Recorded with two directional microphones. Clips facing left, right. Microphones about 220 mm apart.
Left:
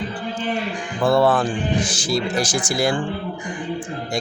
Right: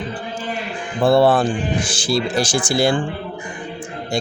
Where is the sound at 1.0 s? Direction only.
30° right (ahead or behind).